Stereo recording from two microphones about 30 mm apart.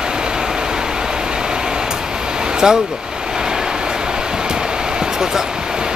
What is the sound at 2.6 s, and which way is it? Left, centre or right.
Speech, right.